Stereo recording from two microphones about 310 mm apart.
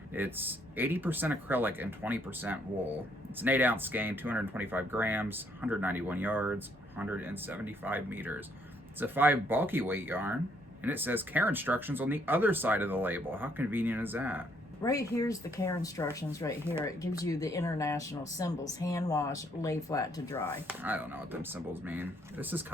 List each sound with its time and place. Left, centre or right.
0.1 s speech: centre
14.8 s speech: centre
20.7 s speech: centre